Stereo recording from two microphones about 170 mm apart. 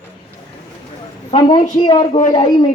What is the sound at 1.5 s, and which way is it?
Speech, 45° left (ahead or behind).